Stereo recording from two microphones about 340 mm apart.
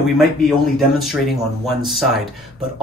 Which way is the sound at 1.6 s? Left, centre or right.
Centre.